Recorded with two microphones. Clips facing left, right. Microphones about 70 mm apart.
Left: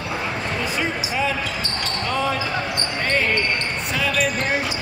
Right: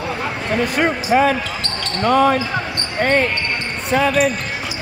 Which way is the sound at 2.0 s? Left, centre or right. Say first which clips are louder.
Right 10 dB; right.